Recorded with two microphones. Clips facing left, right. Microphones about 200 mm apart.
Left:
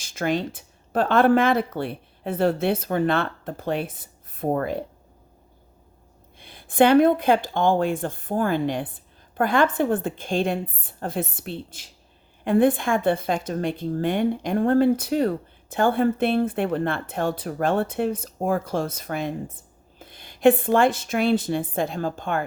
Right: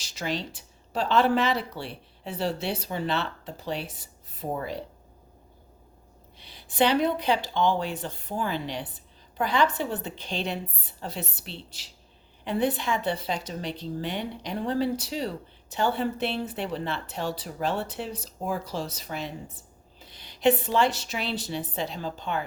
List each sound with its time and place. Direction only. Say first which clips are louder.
0.0 s a woman's voice: left 7 dB; 50° left (ahead or behind)
6.4 s a woman's voice: left 6 dB; 50° left (ahead or behind)